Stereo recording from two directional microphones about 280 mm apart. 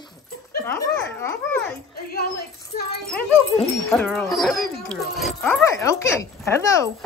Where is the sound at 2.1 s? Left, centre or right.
Left.